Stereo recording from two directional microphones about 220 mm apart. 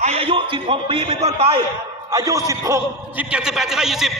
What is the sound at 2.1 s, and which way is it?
A man's voice, 15° right (ahead or behind).